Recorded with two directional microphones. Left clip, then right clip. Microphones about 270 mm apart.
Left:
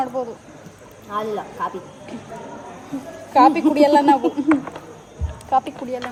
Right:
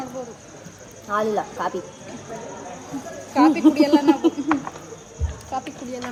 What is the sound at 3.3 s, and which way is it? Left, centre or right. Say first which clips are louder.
Speech: left 5 dB; left.